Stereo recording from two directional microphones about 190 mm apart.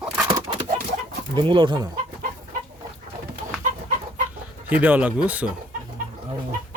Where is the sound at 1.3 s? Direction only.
25° right (ahead or behind).